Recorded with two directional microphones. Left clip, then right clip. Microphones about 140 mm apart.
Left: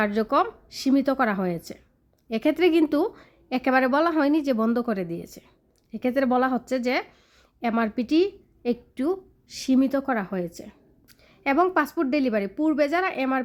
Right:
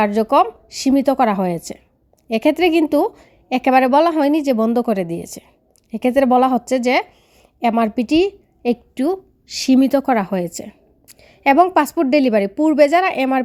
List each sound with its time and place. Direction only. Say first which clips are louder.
0.0 s a woman's voice: right 8 dB; 20° right (ahead or behind)